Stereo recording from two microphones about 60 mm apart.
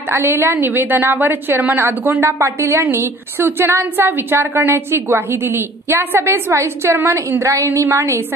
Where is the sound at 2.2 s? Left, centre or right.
Right.